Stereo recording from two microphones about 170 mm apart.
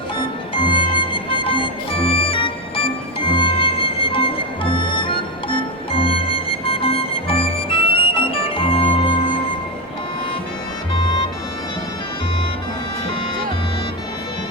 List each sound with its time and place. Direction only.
0.5 s music: 30° left (ahead or behind)